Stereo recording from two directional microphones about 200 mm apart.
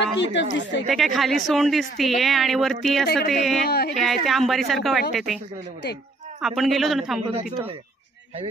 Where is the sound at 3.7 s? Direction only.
55° left (ahead or behind).